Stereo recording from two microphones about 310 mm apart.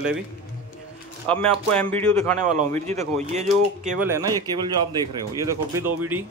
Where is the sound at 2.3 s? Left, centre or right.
Right.